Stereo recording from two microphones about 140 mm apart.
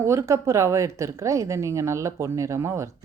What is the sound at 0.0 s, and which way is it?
A woman's voice, 20° right (ahead or behind).